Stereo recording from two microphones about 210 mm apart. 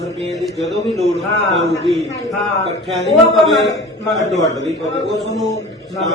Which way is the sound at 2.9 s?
Centre (ahead or behind).